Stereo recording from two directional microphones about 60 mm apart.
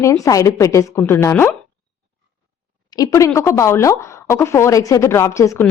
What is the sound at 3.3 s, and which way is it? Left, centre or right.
A woman's voice, left.